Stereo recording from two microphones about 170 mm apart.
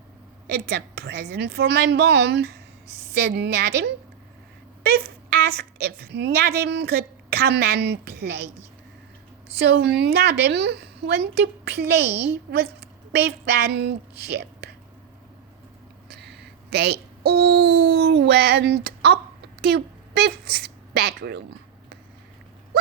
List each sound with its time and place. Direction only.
0.4 s a woman's voice: 80° right
4.9 s a woman's voice: 65° right (ahead or behind)
9.6 s a woman's voice: 85° right
13.1 s a woman's voice: 90° right
16.0 s speech: 75° right (ahead or behind)